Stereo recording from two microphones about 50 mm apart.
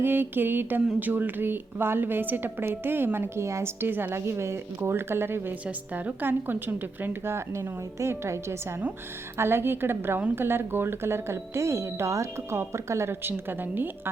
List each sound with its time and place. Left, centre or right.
0.0 s a woman's voice: right
3.4 s a woman's voice: right
5.6 s a woman's voice: right
6.2 s a woman's voice: right
7.3 s a woman's voice: right
9.4 s a woman's voice: right
12.5 s speech: right
13.2 s a woman's voice: right